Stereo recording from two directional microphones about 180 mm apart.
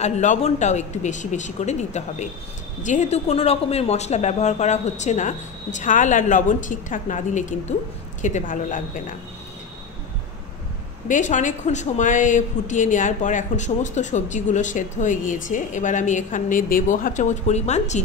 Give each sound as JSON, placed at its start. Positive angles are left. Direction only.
{"t": 0.0, "sound": "a woman's voice", "side_deg": 40}
{"t": 11.1, "sound": "a woman's voice", "side_deg": 45}